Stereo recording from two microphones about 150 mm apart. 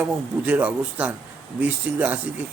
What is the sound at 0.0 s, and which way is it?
Speech, 10° right (ahead or behind).